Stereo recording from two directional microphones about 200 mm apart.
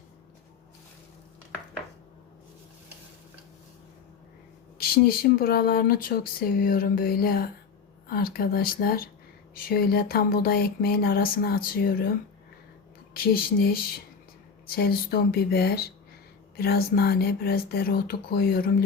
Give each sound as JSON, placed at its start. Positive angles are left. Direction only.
{"t": 4.8, "sound": "speech", "side_deg": 50}
{"t": 13.1, "sound": "speech", "side_deg": 50}
{"t": 14.8, "sound": "speech", "side_deg": 50}